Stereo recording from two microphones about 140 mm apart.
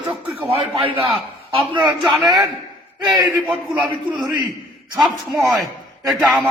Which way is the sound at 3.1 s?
25° right (ahead or behind).